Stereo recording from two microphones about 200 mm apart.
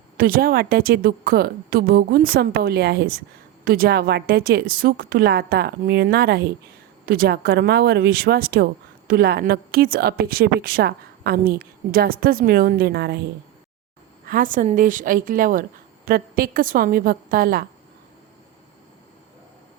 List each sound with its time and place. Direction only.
0.2 s a woman's voice: 45° right (ahead or behind)
14.3 s a woman's voice: 45° right (ahead or behind)